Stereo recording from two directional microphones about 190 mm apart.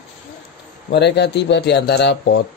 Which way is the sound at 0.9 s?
60° left (ahead or behind).